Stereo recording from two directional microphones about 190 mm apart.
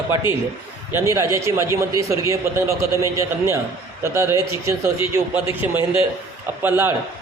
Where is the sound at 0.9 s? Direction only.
15° right (ahead or behind).